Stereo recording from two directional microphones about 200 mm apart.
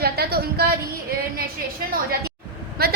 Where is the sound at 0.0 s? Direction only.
50° right (ahead or behind).